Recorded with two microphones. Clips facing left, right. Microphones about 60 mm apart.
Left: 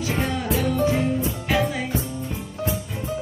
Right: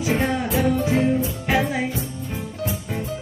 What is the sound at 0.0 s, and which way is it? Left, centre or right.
Music, right.